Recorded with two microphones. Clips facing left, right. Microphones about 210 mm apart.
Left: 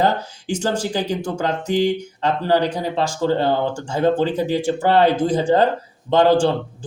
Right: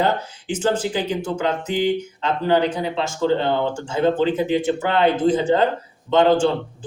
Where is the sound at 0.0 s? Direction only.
40° left (ahead or behind).